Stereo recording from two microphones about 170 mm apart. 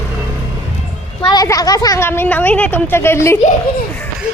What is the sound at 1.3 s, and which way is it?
Speech, 20° left (ahead or behind).